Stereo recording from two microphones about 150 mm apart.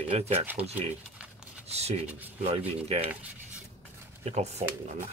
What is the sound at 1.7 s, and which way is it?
Speech, 45° right (ahead or behind).